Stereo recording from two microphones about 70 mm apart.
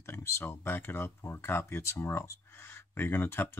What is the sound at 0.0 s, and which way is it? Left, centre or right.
Speech, left.